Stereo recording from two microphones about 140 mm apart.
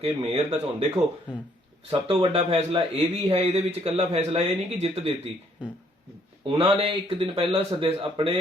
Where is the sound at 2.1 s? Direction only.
45° right (ahead or behind).